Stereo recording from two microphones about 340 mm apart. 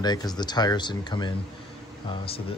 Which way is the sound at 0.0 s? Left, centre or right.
Centre.